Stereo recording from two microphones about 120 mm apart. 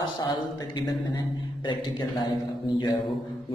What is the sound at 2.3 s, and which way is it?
Speech, 40° left (ahead or behind).